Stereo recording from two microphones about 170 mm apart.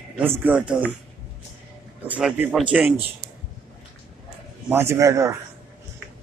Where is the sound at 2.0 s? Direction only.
10° right (ahead or behind).